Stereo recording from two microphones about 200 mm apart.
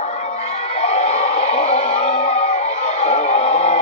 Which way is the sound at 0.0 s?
35° left (ahead or behind).